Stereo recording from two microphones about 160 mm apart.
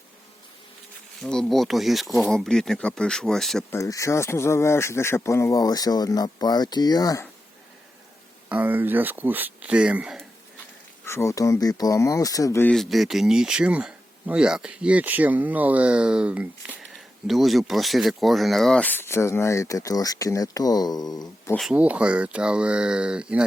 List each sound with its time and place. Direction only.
1.2 s speech: centre (ahead or behind)
3.7 s speech: 20° left (ahead or behind)
8.4 s speech: 10° right (ahead or behind)
11.0 s speech: 15° left (ahead or behind)
12.7 s speech: centre (ahead or behind); by 21.5 s 25° left (ahead or behind)
21.5 s speech: centre (ahead or behind)